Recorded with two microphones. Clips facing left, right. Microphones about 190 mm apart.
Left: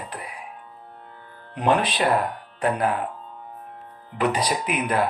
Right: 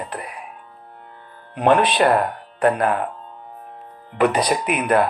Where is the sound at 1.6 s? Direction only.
60° right (ahead or behind).